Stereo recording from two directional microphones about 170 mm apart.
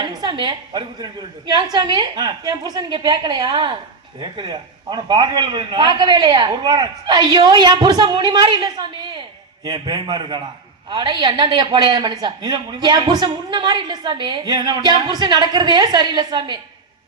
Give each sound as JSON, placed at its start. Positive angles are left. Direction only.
{"t": 0.0, "sound": "a woman's voice", "side_deg": -25}